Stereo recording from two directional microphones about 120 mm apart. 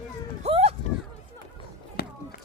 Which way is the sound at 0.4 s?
55° right (ahead or behind).